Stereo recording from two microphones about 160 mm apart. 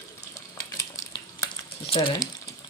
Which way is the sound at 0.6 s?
20° left (ahead or behind).